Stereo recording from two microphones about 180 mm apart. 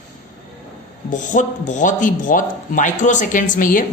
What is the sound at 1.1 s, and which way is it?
Speech, 45° left (ahead or behind).